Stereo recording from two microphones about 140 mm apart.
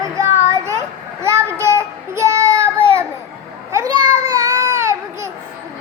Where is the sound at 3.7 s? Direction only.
20° right (ahead or behind).